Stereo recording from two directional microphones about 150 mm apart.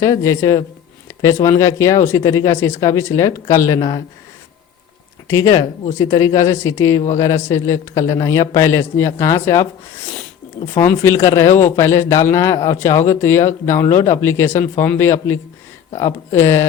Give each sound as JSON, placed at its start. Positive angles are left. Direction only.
{"t": 0.0, "sound": "a man's voice", "side_deg": 20}
{"t": 5.3, "sound": "a man's voice", "side_deg": 20}
{"t": 10.8, "sound": "speech", "side_deg": 15}